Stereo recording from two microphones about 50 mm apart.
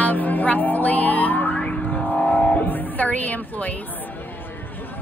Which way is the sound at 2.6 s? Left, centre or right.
Left.